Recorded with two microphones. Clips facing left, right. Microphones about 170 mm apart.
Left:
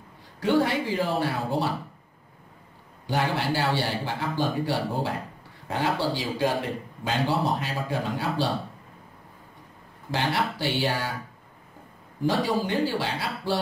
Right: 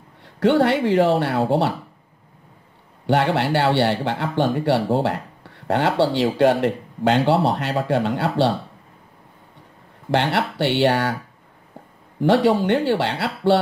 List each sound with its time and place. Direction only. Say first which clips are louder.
0.4 s speech: right 6 dB; 70° right (ahead or behind)
3.1 s speech: right 7 dB; 70° right (ahead or behind)
10.1 s speech: right 6 dB; 70° right (ahead or behind)
12.2 s speech: right 8 dB; 70° right (ahead or behind)